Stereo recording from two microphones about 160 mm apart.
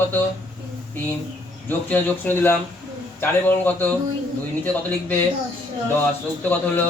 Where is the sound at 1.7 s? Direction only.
10° left (ahead or behind).